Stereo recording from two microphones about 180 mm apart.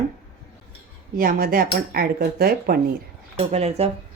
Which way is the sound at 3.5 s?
35° right (ahead or behind).